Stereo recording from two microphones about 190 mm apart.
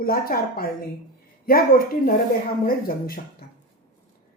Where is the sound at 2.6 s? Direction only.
50° left (ahead or behind).